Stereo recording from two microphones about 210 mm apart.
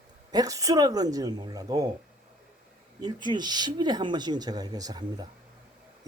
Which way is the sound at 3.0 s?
20° right (ahead or behind).